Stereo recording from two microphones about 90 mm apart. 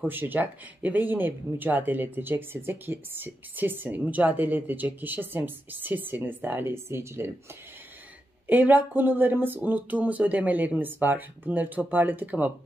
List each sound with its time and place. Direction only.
0.0 s speech: 20° right (ahead or behind)
8.5 s speech: 20° right (ahead or behind)